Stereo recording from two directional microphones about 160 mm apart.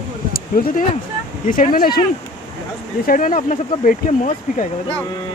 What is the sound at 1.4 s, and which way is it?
Speech, 60° left (ahead or behind).